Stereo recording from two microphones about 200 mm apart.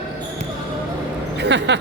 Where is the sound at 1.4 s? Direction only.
60° right (ahead or behind).